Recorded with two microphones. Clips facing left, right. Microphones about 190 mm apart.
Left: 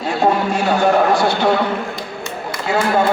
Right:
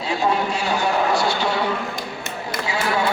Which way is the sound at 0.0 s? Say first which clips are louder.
Left 5 dB; 55° left (ahead or behind).